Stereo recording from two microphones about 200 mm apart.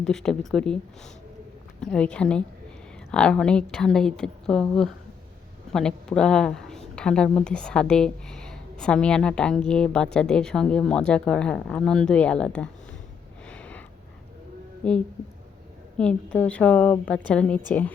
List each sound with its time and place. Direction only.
0.0 s a woman's voice: 5° left (ahead or behind)
1.8 s a woman's voice: 5° left (ahead or behind)
13.5 s a sound: 5° left (ahead or behind)
14.8 s a woman's voice: 5° left (ahead or behind)